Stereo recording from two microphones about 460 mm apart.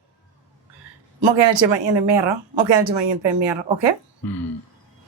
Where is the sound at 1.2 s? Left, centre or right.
Right.